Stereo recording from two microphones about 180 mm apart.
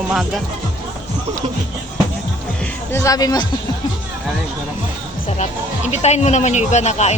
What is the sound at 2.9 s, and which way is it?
Speech, 20° left (ahead or behind).